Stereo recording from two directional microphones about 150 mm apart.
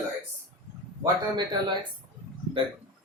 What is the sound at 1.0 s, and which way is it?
Speech, 30° right (ahead or behind).